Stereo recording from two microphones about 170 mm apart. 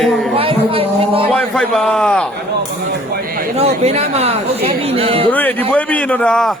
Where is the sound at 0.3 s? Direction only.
35° right (ahead or behind).